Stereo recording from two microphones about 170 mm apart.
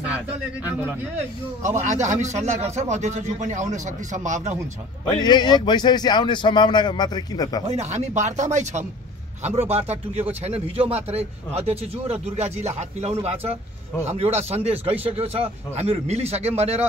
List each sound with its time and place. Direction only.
1.9 s speech: 45° right (ahead or behind)
5.0 s a man's voice: 25° left (ahead or behind)
7.6 s speech: 40° right (ahead or behind)